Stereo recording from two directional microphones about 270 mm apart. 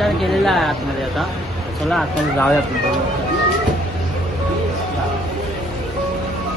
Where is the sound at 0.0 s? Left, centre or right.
Centre.